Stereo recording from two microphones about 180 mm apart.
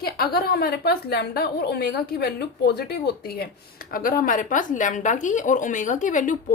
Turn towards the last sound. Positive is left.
turn(degrees=45)  # may be behind; listen again after turning